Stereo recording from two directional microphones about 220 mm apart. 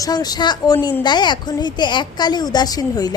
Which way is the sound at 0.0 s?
15° left (ahead or behind).